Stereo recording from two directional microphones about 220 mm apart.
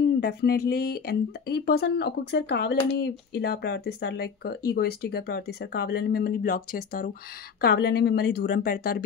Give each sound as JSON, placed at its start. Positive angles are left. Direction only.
{"t": 0.0, "sound": "speech", "side_deg": 50}